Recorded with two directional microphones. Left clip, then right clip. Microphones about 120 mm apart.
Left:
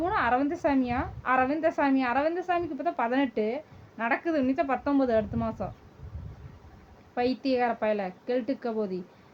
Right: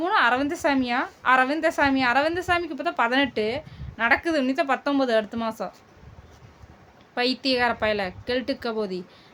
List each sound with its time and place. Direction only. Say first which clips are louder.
0.0 s a woman's voice: right 5 dB; 35° right (ahead or behind)
7.2 s a woman's voice: right 4 dB; 30° right (ahead or behind)